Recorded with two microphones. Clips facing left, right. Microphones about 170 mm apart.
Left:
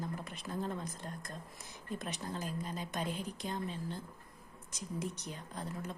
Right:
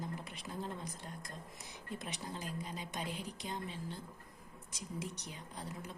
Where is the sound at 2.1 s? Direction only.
15° right (ahead or behind).